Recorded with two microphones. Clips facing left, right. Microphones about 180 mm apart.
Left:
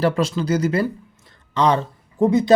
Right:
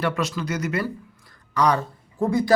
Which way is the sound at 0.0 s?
30° left (ahead or behind).